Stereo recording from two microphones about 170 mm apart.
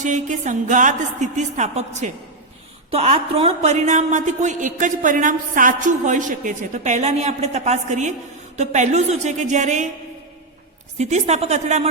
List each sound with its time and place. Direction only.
0.0 s a woman's voice: 45° right (ahead or behind)
10.9 s speech: 40° right (ahead or behind)